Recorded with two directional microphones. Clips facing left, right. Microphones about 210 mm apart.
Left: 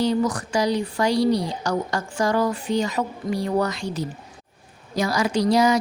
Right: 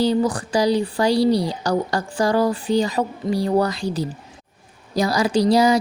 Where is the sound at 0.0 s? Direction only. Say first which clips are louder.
Right 2 dB; 30° right (ahead or behind).